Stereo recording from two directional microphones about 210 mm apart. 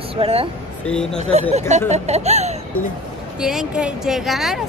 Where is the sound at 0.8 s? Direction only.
5° left (ahead or behind).